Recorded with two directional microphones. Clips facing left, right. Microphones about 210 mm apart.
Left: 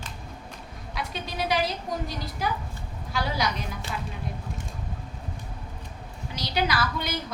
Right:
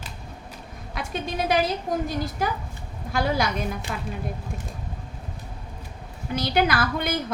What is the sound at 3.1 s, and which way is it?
Speech, 50° right (ahead or behind).